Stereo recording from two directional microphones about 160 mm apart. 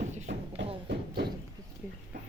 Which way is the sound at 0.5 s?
90° right.